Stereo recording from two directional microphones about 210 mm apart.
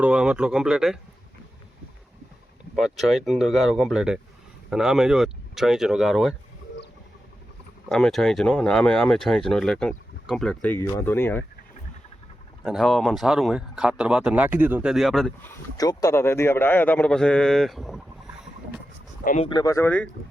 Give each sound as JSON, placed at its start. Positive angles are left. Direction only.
{"t": 0.0, "sound": "speech", "side_deg": -5}
{"t": 2.7, "sound": "speech", "side_deg": 0}
{"t": 7.9, "sound": "speech", "side_deg": 0}
{"t": 12.6, "sound": "speech", "side_deg": 0}
{"t": 15.4, "sound": "a man's voice", "side_deg": 15}
{"t": 19.2, "sound": "speech", "side_deg": 40}
{"t": 19.5, "sound": "a man's voice", "side_deg": 20}